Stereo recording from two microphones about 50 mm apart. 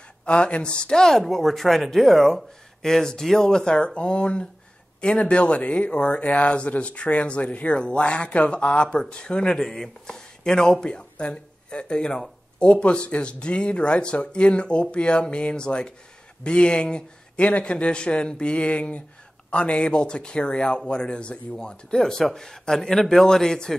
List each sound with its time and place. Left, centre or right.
0.2 s speech: left